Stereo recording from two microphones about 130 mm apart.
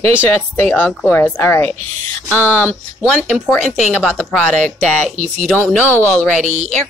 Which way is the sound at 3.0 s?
5° right (ahead or behind).